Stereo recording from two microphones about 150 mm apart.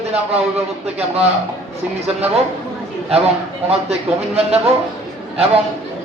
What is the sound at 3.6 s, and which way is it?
Speech, 45° right (ahead or behind).